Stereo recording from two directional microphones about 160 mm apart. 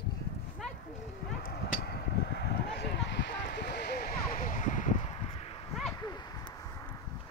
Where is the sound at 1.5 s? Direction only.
85° left; by 5.0 s 50° left (ahead or behind).